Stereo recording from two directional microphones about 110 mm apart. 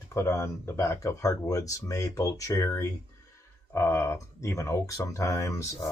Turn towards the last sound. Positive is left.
turn(degrees=25)  # may be behind; listen again after turning